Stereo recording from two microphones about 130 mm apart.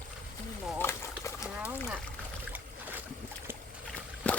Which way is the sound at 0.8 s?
20° left (ahead or behind).